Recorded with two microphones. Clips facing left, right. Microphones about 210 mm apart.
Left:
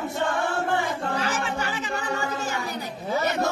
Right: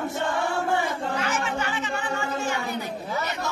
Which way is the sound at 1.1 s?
35° left (ahead or behind).